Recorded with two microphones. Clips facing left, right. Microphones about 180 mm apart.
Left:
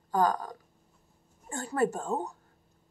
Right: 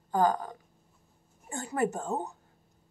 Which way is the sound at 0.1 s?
20° right (ahead or behind).